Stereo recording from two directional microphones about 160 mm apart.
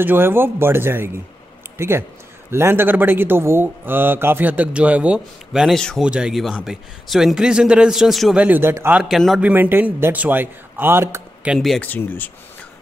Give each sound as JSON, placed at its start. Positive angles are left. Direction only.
{"t": 0.0, "sound": "a man's voice", "side_deg": -15}
{"t": 9.1, "sound": "a man's voice", "side_deg": 0}
{"t": 9.5, "sound": "a man's voice", "side_deg": -10}
{"t": 11.4, "sound": "a man's voice", "side_deg": 0}
{"t": 11.9, "sound": "speech", "side_deg": 10}